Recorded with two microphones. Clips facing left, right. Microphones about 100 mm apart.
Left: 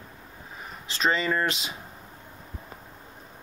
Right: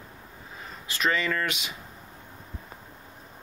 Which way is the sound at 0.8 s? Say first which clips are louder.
Left 1 dB; 25° left (ahead or behind).